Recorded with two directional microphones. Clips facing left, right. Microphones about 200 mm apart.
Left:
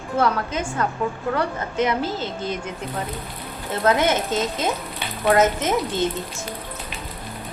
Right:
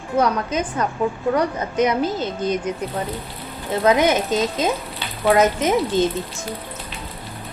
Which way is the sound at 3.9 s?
15° right (ahead or behind).